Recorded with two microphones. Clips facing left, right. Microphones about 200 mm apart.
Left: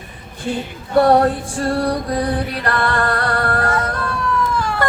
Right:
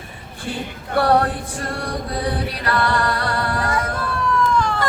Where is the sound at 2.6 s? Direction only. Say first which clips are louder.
Even; 50° left (ahead or behind).